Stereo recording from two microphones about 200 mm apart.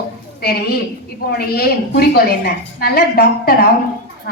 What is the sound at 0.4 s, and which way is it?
A woman's voice, 50° left (ahead or behind).